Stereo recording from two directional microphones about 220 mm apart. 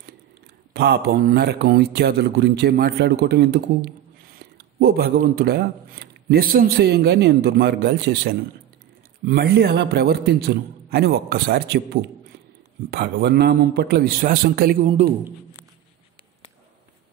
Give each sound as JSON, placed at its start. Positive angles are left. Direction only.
{"t": 0.7, "sound": "speech", "side_deg": -50}